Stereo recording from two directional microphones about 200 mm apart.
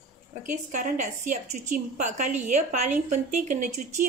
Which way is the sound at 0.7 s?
40° right (ahead or behind).